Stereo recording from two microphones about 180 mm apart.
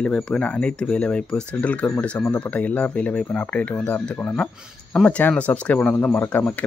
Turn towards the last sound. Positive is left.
turn(degrees=10)  # may be behind; listen again after turning